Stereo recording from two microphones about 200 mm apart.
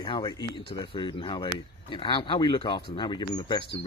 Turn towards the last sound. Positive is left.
turn(degrees=20)  # may be behind; listen again after turning